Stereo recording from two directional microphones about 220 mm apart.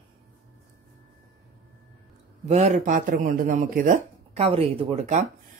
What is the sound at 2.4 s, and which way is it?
Speech, 30° right (ahead or behind).